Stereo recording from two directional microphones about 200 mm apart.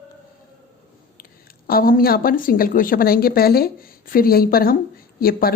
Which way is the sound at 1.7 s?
45° left (ahead or behind).